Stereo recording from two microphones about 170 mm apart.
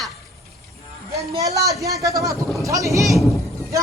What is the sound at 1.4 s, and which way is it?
A woman's voice, 20° right (ahead or behind).